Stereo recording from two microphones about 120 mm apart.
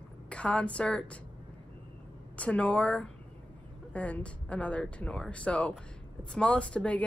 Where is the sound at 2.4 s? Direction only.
10° left (ahead or behind).